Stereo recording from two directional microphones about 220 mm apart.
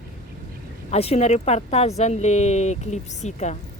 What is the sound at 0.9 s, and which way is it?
Mantra, 25° left (ahead or behind).